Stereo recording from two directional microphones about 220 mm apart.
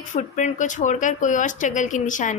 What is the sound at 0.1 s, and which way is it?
A woman's voice, 35° left (ahead or behind).